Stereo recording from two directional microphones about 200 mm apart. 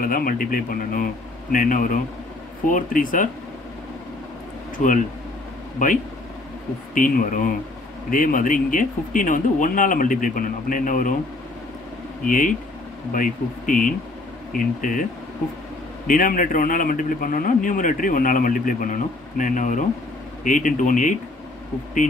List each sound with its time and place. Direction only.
0.0 s a man's voice: 45° left (ahead or behind)
4.7 s speech: 40° left (ahead or behind)
6.9 s a man's voice: 40° left (ahead or behind)
12.3 s a man's voice: 40° left (ahead or behind)
16.1 s a man's voice: 45° left (ahead or behind)